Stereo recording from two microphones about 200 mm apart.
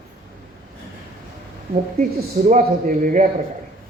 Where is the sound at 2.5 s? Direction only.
40° right (ahead or behind).